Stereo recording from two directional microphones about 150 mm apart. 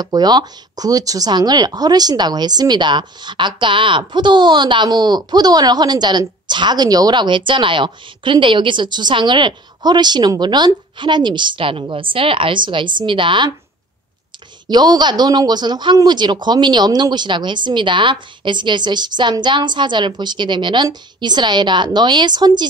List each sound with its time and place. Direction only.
0.0 s speech: 25° right (ahead or behind)
14.7 s speech: 30° right (ahead or behind)